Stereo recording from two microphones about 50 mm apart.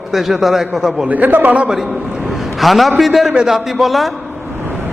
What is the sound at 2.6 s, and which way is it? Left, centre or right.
A man's voice, centre.